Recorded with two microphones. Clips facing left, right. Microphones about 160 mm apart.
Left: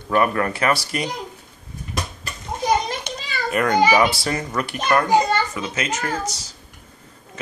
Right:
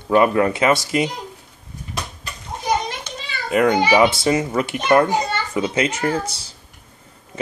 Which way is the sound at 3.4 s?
20° right (ahead or behind).